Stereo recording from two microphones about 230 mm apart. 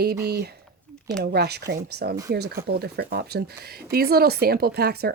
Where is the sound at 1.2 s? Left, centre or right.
Right.